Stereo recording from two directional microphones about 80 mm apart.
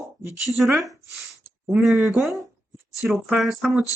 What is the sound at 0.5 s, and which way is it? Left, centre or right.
Speech, centre.